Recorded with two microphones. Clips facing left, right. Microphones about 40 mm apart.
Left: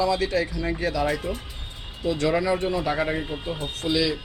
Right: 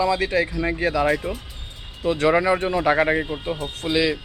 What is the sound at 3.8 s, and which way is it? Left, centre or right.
Speech, right.